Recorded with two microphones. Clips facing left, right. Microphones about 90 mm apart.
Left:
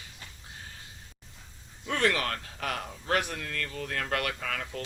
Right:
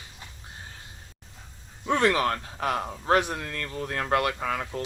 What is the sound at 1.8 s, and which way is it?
Speech, 25° right (ahead or behind).